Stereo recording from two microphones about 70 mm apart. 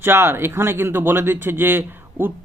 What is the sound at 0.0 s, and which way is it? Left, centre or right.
Speech, right.